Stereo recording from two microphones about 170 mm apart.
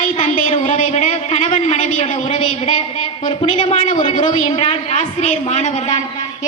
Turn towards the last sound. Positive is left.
turn(degrees=45)  # may be behind; listen again after turning